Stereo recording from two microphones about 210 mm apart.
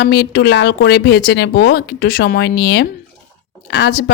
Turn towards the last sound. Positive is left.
turn(degrees=55)  # may be behind; listen again after turning